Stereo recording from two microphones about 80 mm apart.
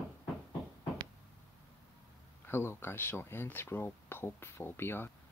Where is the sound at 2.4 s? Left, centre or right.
Left.